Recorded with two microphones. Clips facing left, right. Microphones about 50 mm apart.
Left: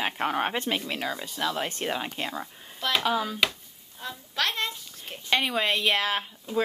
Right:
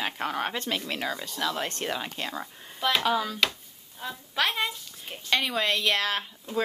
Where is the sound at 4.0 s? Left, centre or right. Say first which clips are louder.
Right 1 dB; centre.